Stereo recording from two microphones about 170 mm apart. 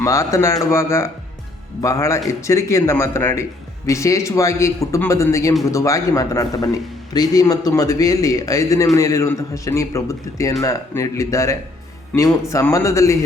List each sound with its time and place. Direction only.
0.0 s a man's voice: 20° left (ahead or behind)